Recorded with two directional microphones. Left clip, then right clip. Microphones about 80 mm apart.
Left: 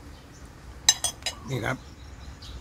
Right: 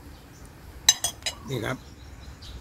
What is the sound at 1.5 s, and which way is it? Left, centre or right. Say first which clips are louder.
Cutlery: left 2 dB; left.